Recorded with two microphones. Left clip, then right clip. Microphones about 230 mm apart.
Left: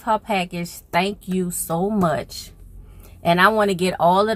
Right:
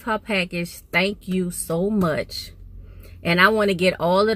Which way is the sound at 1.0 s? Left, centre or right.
Left.